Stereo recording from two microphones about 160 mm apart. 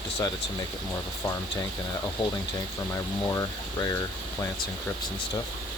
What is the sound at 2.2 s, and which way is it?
Speech, 30° left (ahead or behind).